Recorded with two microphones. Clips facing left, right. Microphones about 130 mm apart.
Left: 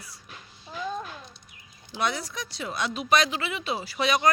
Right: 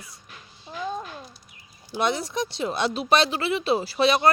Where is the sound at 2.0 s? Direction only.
25° right (ahead or behind).